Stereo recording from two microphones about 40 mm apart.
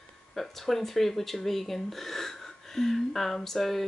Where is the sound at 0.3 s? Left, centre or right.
Centre.